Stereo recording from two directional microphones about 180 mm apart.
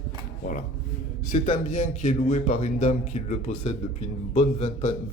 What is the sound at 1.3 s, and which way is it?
A man's voice, 45° left (ahead or behind).